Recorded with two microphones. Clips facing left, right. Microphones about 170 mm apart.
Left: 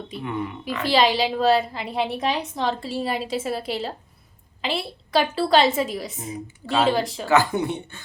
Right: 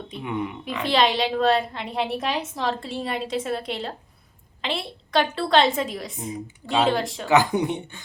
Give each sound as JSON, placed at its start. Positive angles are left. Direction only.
{"t": 0.2, "sound": "speech", "side_deg": -15}
{"t": 0.8, "sound": "a woman's voice", "side_deg": 0}
{"t": 7.3, "sound": "speech", "side_deg": -15}